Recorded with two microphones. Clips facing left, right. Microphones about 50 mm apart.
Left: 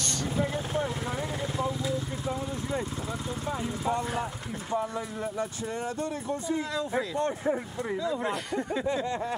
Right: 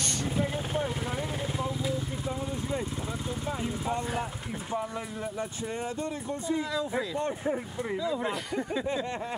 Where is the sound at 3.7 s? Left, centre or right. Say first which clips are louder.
Left 5 dB; left.